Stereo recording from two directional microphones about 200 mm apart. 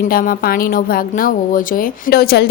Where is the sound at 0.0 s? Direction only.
45° left (ahead or behind).